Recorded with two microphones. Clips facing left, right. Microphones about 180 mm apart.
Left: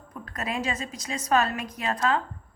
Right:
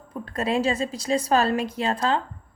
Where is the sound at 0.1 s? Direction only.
30° right (ahead or behind).